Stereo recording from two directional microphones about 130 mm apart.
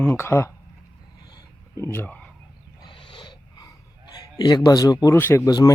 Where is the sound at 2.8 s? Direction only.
40° left (ahead or behind).